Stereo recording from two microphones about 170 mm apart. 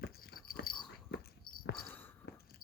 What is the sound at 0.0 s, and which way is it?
Dog, 70° left (ahead or behind).